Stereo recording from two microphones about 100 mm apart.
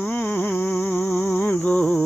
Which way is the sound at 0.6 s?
15° left (ahead or behind).